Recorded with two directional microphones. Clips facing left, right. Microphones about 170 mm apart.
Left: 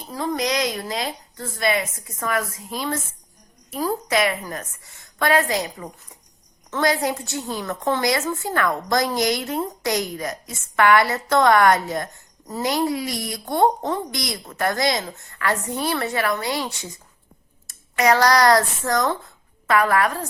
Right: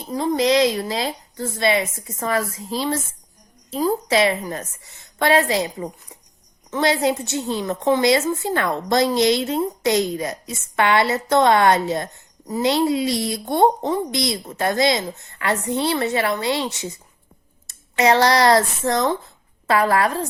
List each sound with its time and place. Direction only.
0.1 s a woman's voice: 25° right (ahead or behind)